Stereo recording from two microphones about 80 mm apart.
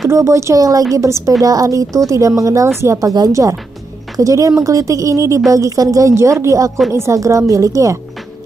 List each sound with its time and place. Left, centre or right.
0.1 s a woman's voice: right